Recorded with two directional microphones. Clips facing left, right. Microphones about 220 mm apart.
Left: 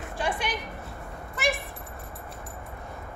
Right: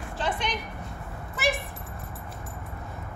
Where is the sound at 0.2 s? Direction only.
10° left (ahead or behind).